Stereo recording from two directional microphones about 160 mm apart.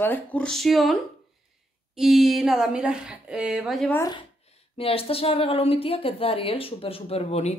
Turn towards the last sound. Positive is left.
turn(degrees=40)  # may be behind; listen again after turning